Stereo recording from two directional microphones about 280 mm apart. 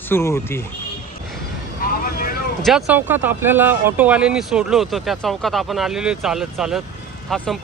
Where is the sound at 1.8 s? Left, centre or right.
Left.